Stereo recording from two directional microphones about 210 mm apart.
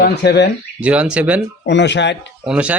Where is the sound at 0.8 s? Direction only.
5° right (ahead or behind).